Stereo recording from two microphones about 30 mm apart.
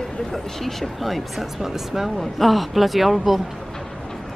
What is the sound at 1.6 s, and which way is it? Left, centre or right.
Speech, centre.